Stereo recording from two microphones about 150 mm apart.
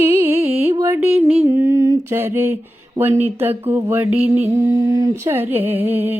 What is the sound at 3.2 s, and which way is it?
Mantra, 15° right (ahead or behind).